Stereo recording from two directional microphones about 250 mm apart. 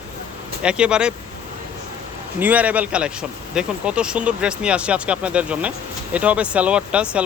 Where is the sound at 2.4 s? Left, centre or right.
Centre.